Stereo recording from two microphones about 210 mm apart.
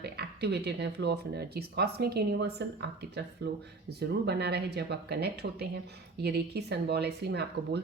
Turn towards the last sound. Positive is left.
turn(degrees=-50)  # may be behind; listen again after turning